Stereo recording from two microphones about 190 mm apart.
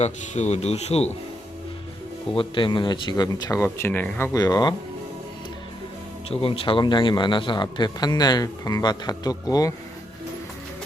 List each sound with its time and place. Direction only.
0.0 s speech: 35° left (ahead or behind)
2.3 s a man's voice: 25° left (ahead or behind)
6.3 s a man's voice: 30° left (ahead or behind)